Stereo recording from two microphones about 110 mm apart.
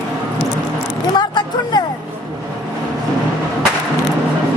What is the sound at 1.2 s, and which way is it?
Vehicle, 40° left (ahead or behind).